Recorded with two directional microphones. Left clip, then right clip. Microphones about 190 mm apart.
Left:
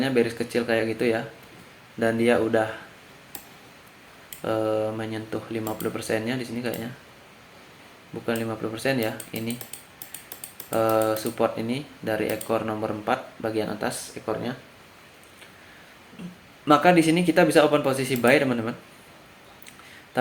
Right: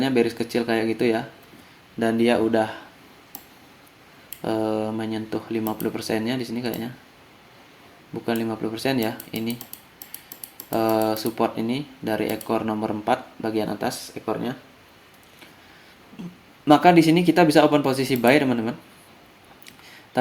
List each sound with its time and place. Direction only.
0.0 s speech: 45° right (ahead or behind)
4.4 s speech: 45° right (ahead or behind)
8.3 s speech: 50° right (ahead or behind)
10.7 s speech: 45° right (ahead or behind)
16.6 s speech: 50° right (ahead or behind)